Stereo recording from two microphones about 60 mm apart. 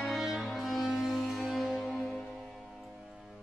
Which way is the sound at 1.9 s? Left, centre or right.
Centre.